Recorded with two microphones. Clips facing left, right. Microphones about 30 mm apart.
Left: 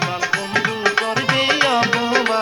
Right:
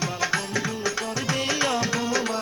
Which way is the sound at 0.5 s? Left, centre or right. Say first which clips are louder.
Left 9 dB; left.